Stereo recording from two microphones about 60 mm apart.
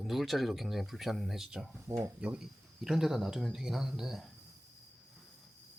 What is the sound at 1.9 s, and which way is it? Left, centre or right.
Speech, right.